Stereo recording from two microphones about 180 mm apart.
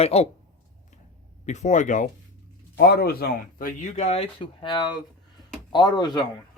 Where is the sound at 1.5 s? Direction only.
40° left (ahead or behind).